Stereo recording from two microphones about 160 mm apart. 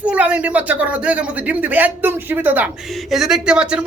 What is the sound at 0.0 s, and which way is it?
A woman's voice, 10° right (ahead or behind).